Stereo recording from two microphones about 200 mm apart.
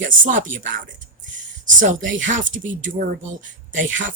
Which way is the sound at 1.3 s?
40° right (ahead or behind).